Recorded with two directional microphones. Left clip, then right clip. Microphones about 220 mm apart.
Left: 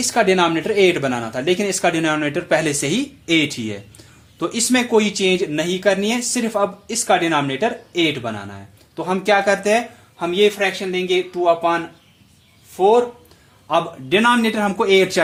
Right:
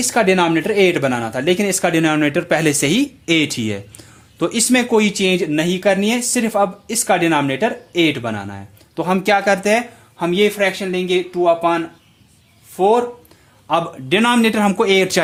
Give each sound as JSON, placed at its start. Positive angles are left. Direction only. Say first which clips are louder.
{"t": 0.0, "sound": "speech", "louder": "right 1 dB", "side_deg": -35}